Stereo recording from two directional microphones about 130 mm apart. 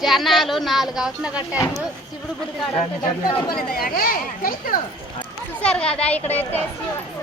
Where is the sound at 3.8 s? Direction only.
90° left.